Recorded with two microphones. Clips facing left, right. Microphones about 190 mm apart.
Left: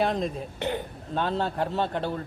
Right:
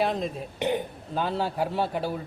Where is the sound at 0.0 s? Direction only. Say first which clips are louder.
Left 1 dB; centre (ahead or behind).